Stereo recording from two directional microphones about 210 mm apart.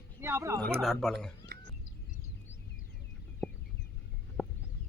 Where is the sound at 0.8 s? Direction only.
Centre (ahead or behind).